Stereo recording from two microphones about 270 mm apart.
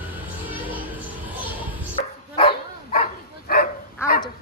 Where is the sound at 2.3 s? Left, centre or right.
Centre.